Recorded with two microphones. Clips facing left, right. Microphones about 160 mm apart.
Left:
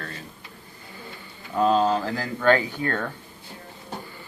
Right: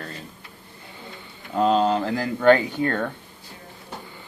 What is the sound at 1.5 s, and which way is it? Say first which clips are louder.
Speech: right 1 dB; 20° right (ahead or behind).